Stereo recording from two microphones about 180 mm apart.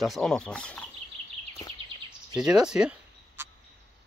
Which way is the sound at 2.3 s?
5° right (ahead or behind).